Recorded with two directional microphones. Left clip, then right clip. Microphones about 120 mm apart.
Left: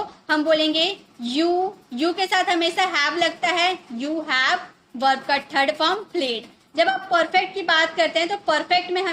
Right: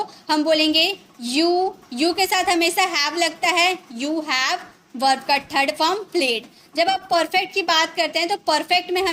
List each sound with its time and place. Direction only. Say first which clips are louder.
0.3 s a child's voice: right 1 dB; 25° right (ahead or behind)